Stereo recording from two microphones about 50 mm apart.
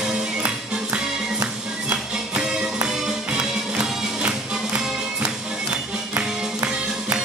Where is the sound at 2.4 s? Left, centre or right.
Centre.